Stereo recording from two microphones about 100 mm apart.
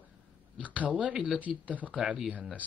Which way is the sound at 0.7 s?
15° right (ahead or behind).